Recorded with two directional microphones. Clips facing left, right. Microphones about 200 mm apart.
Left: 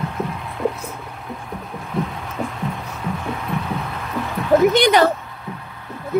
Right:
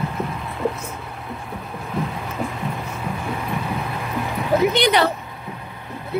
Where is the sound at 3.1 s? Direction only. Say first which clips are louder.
Left 1 dB; 5° right (ahead or behind).